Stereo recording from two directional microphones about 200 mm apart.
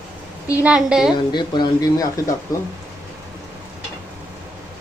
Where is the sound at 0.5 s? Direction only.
5° right (ahead or behind).